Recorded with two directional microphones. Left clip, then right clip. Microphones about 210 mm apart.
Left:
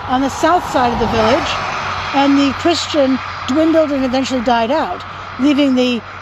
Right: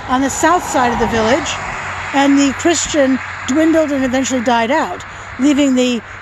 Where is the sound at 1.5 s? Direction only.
45° left (ahead or behind).